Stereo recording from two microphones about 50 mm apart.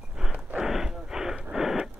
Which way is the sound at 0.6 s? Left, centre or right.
Centre.